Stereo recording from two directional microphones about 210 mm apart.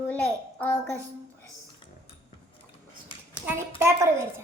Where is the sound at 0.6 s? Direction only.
5° left (ahead or behind).